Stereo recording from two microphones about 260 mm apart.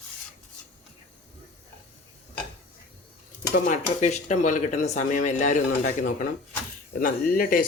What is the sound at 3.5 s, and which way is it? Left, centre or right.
Speech, left.